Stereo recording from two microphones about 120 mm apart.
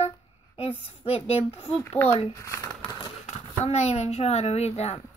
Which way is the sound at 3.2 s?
65° left (ahead or behind).